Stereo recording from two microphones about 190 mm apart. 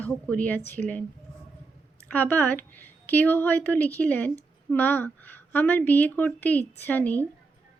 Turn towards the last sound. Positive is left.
turn(degrees=10)  # may be behind; listen again after turning